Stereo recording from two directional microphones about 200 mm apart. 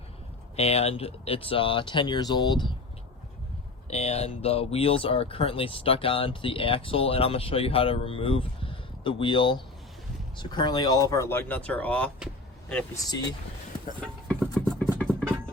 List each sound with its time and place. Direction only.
0.5 s speech: 30° left (ahead or behind)
3.8 s speech: 30° left (ahead or behind); by 12.1 s 5° left (ahead or behind)
14.0 s a sound: 5° left (ahead or behind)